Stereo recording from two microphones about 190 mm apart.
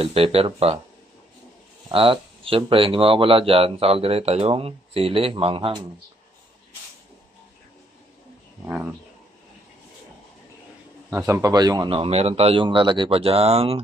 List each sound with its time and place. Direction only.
0.0 s speech: 30° right (ahead or behind)
1.9 s speech: 30° right (ahead or behind)
11.1 s speech: 15° right (ahead or behind); by 13.7 s 30° right (ahead or behind)